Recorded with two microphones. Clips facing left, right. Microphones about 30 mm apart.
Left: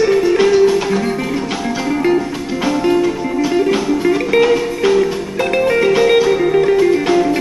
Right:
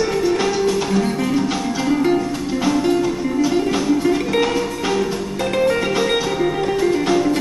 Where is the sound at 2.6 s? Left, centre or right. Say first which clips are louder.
Left 4 dB; centre.